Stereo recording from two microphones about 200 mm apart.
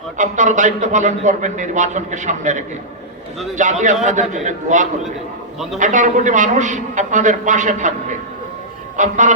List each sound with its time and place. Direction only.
0.2 s a man's voice: 40° right (ahead or behind)